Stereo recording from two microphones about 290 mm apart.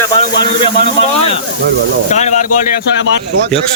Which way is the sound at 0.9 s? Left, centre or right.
Centre.